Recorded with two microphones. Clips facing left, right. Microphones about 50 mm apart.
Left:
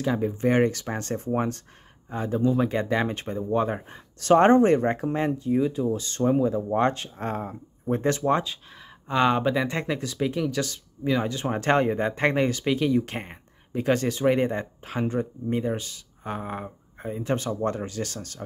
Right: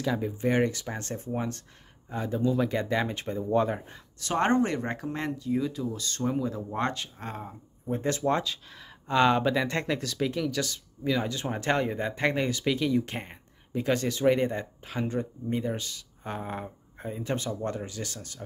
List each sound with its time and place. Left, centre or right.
0.0 s speech: left
2.0 s speech: left
4.4 s speech: left
6.8 s speech: left
8.3 s speech: left
9.0 s speech: centre
13.9 s speech: left
14.2 s speech: centre
14.9 s speech: left
15.1 s speech: left
17.2 s speech: left